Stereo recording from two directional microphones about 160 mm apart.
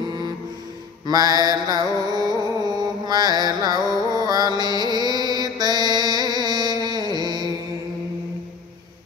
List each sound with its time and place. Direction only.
0.0 s music: 25° right (ahead or behind)